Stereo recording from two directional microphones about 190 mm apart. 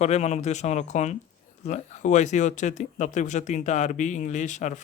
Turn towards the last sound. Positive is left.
turn(degrees=40)  # may be behind; listen again after turning